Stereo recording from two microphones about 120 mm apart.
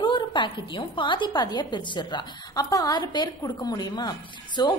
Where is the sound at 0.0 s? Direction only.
40° left (ahead or behind).